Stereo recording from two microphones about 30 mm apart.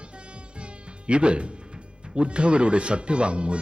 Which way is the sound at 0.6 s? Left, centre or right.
Right.